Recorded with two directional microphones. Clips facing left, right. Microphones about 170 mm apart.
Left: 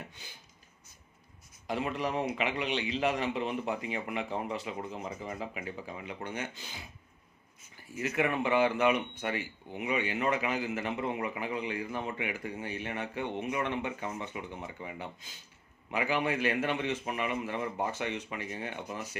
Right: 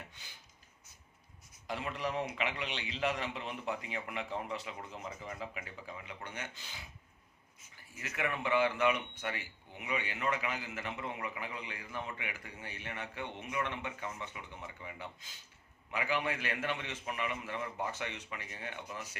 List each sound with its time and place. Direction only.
1.6 s a man's voice: 15° left (ahead or behind)
8.0 s speech: 25° left (ahead or behind)